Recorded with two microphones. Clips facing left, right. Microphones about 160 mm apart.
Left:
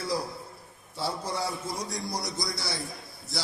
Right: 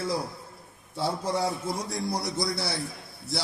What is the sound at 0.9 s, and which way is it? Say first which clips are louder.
A man's voice: right 4 dB; 55° right (ahead or behind).